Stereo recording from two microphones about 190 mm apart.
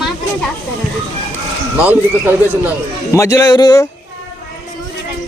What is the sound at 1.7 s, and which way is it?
Speech, 10° right (ahead or behind).